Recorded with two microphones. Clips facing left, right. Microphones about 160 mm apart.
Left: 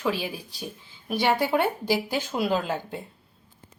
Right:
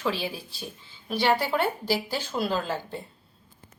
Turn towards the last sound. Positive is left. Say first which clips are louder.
# left 2 dB
turn(degrees=15)  # may be behind; listen again after turning